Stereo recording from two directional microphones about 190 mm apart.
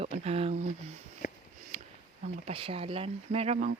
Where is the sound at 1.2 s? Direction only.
45° left (ahead or behind).